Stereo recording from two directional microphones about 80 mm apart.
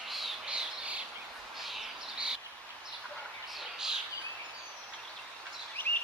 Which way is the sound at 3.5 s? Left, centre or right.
Centre.